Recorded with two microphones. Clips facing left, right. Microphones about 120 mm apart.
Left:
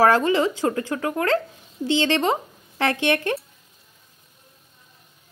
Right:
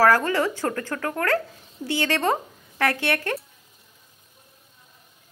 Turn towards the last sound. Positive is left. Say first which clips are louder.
# left 3 dB
turn(degrees=20)  # may be behind; listen again after turning